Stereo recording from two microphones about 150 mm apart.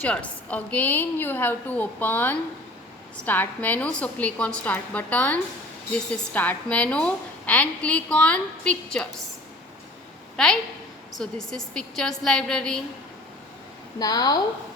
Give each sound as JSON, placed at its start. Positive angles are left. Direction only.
{"t": 0.0, "sound": "a woman's voice", "side_deg": 10}
{"t": 10.3, "sound": "a woman's voice", "side_deg": 5}
{"t": 14.0, "sound": "a woman's voice", "side_deg": 25}